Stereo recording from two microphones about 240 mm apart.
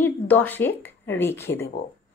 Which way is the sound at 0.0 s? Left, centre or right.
Centre.